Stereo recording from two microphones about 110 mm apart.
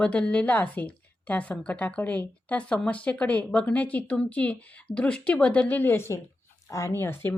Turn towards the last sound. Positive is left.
turn(degrees=20)  # may be behind; listen again after turning